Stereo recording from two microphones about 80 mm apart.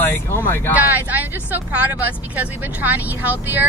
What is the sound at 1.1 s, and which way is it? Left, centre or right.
Speech, right.